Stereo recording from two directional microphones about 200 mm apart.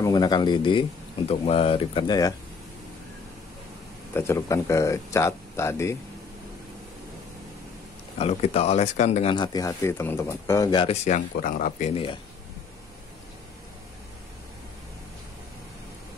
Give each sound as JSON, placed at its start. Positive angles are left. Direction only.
{"t": 0.0, "sound": "speech", "side_deg": 20}
{"t": 4.1, "sound": "speech", "side_deg": 15}
{"t": 8.2, "sound": "speech", "side_deg": 30}
{"t": 9.3, "sound": "speech", "side_deg": 20}
{"t": 11.1, "sound": "speech", "side_deg": 40}
{"t": 11.9, "sound": "speech", "side_deg": 25}